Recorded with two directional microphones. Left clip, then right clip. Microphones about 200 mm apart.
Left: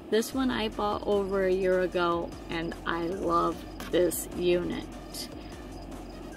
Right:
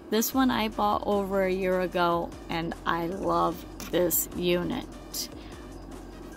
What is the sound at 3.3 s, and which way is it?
Speech, 30° right (ahead or behind).